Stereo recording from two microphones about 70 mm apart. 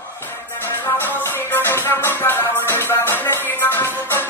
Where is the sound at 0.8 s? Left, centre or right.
Left.